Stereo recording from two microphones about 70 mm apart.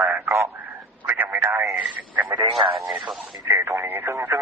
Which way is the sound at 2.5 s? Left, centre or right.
Centre.